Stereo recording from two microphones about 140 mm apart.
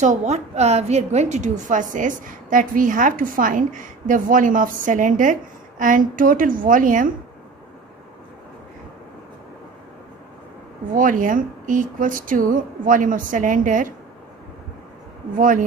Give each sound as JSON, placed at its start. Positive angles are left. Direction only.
{"t": 0.0, "sound": "a woman's voice", "side_deg": -55}
{"t": 11.0, "sound": "a woman's voice", "side_deg": -75}
{"t": 15.3, "sound": "a woman's voice", "side_deg": -70}